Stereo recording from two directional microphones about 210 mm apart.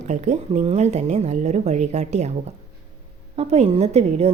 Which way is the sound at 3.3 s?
30° right (ahead or behind).